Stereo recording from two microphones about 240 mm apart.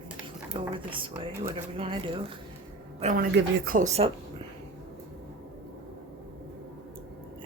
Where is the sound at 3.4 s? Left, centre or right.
Right.